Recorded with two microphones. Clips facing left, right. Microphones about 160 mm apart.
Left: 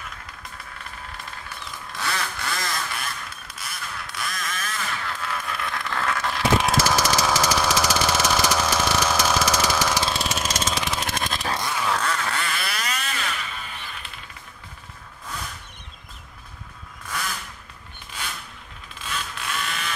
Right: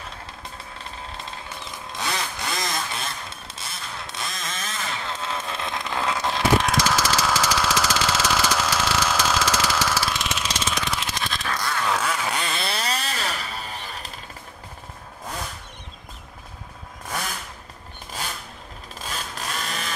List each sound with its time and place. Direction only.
1.9 s vehicle: 20° right (ahead or behind)
6.6 s engine: 10° left (ahead or behind)
10.1 s engine: 40° left (ahead or behind)
11.8 s quack: 5° right (ahead or behind)
12.3 s a sound: 20° right (ahead or behind); by 14.1 s 35° right (ahead or behind)
18.9 s a sound: 40° right (ahead or behind)